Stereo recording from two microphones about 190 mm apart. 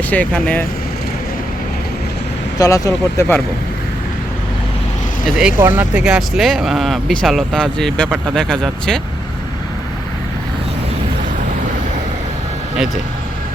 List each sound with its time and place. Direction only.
0.1 s speech: 10° left (ahead or behind)
2.6 s speech: 15° left (ahead or behind)
5.4 s speech: 10° right (ahead or behind)